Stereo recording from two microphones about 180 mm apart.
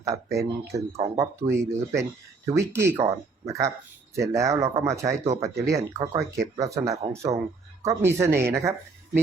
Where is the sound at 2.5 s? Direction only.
15° right (ahead or behind).